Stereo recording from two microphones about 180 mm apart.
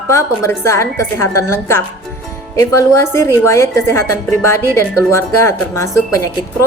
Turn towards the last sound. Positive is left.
turn(degrees=15)  # may be behind; listen again after turning